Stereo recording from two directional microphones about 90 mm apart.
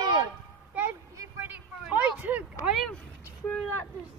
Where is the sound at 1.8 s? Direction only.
15° right (ahead or behind).